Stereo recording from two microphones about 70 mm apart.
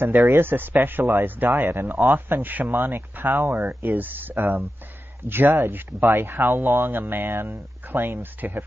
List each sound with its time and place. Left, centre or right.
0.0 s speech: right
3.4 s speech: right
3.8 s speech: right